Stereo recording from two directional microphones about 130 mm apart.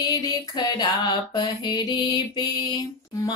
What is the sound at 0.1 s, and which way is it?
Mantra, 30° left (ahead or behind).